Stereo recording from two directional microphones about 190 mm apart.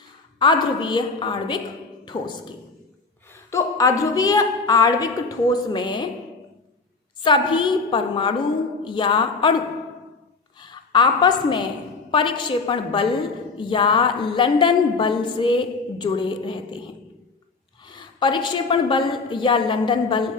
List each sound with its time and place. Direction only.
0.3 s a woman's voice: 25° left (ahead or behind)
3.5 s a woman's voice: 15° left (ahead or behind)
7.3 s a woman's voice: 25° left (ahead or behind)
10.6 s a woman's voice: 25° left (ahead or behind)